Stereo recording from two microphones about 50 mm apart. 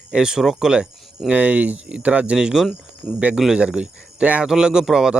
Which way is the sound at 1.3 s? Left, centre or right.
Right.